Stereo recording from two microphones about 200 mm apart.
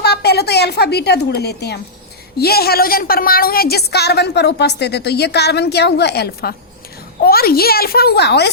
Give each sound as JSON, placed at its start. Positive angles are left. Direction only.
{"t": 0.0, "sound": "a woman's voice", "side_deg": 55}